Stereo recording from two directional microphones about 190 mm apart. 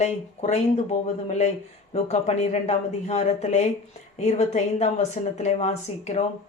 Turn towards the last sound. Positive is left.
turn(degrees=35)  # may be behind; listen again after turning